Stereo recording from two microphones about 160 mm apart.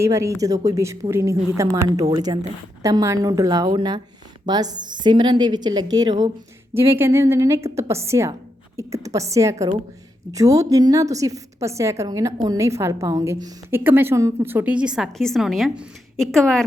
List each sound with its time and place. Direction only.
0.0 s a woman's voice: 20° right (ahead or behind); by 16.6 s centre (ahead or behind)